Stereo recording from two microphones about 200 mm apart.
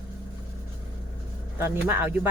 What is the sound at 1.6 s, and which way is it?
Speech, 10° right (ahead or behind).